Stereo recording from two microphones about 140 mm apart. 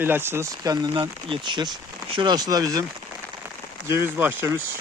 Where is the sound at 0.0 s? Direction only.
15° right (ahead or behind).